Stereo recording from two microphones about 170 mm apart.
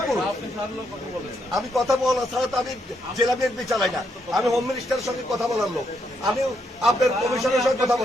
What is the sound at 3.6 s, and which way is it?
A man's voice, centre (ahead or behind).